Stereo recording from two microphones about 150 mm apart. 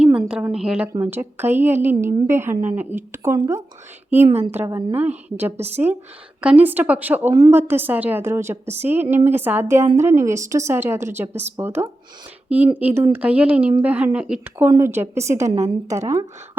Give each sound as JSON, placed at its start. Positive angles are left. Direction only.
{"t": 0.0, "sound": "a woman's voice", "side_deg": -5}
{"t": 5.5, "sound": "speech", "side_deg": -45}
{"t": 6.4, "sound": "a woman's voice", "side_deg": -10}